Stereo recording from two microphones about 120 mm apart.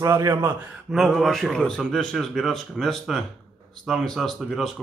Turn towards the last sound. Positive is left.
turn(degrees=0)  # may be behind; listen again after turning